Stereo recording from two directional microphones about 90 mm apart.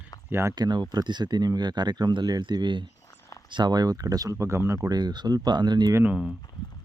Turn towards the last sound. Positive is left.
turn(degrees=-10)  # may be behind; listen again after turning